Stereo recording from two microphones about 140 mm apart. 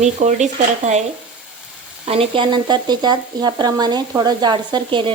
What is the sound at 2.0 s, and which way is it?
Speech, 45° right (ahead or behind).